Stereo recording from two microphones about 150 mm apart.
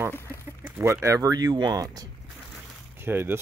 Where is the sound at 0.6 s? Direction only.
20° right (ahead or behind).